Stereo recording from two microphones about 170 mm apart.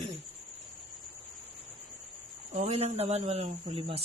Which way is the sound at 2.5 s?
40° right (ahead or behind).